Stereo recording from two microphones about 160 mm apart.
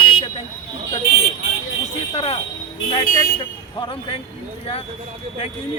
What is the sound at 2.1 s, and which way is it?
Speech, 35° left (ahead or behind).